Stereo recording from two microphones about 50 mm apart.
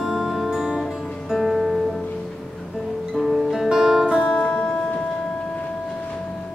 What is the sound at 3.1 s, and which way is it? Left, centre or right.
Music, centre.